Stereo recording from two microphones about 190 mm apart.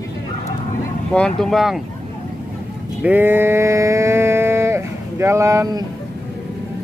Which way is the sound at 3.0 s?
10° right (ahead or behind).